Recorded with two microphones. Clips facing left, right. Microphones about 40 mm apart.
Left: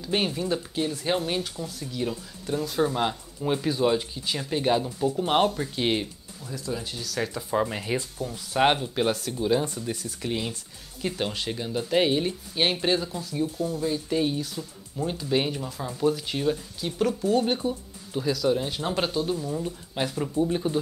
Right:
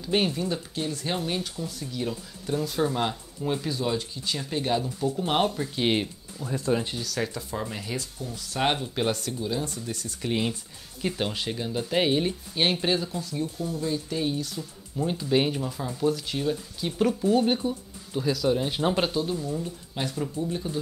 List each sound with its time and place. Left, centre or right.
0.0 s speech: centre
3.4 s speech: centre
5.2 s speech: centre
6.4 s speech: right
7.0 s speech: centre
7.5 s speech: left; by 9.3 s centre
9.4 s speech: left
10.3 s speech: centre
11.0 s speech: centre
16.0 s speech: centre
16.8 s speech: centre
19.4 s speech: centre
20.3 s speech: left